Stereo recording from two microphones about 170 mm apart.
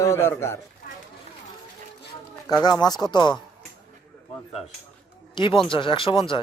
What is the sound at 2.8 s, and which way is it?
Speech, 25° left (ahead or behind).